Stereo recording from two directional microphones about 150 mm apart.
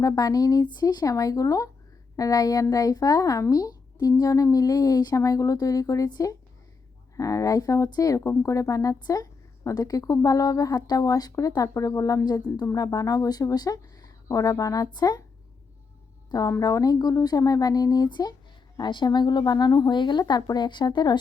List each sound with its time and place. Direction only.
0.0 s a woman's voice: 25° left (ahead or behind)
16.3 s a woman's voice: 25° left (ahead or behind)